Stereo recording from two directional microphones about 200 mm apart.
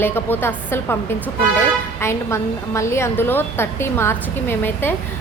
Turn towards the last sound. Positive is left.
turn(degrees=10)  # may be behind; listen again after turning